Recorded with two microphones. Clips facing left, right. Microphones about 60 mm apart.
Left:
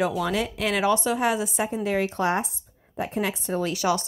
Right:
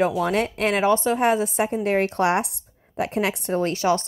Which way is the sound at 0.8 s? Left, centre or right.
Right.